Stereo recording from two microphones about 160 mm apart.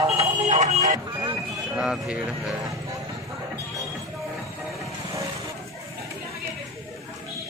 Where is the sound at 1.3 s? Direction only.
5° right (ahead or behind).